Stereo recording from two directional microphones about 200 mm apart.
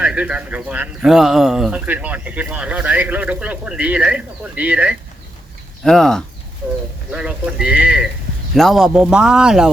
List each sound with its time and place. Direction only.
0.0 s a man's voice: 5° right (ahead or behind)